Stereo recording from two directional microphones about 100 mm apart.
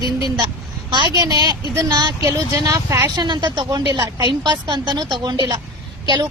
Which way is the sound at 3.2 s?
50° right (ahead or behind).